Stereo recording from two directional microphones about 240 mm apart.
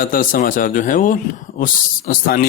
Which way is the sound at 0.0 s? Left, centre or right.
Left.